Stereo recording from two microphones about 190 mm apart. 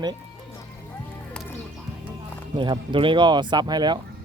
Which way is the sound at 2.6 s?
25° right (ahead or behind).